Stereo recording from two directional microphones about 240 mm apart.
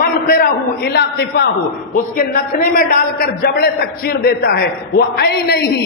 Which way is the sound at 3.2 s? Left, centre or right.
Left.